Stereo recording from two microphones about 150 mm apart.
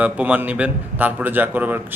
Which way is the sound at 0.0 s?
10° right (ahead or behind).